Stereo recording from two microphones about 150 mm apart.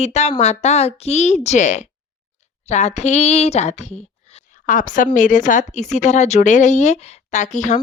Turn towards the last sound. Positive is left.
turn(degrees=55)  # may be behind; listen again after turning